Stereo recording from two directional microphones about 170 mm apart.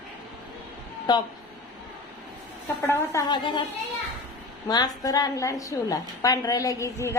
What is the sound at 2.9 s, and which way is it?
Speech, 20° left (ahead or behind).